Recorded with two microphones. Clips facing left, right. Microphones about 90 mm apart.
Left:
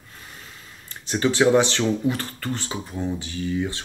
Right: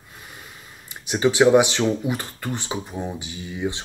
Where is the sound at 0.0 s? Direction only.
15° right (ahead or behind).